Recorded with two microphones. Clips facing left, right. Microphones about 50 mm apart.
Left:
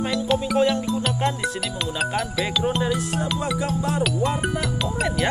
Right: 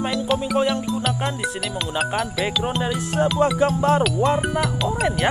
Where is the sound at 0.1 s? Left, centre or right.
Centre.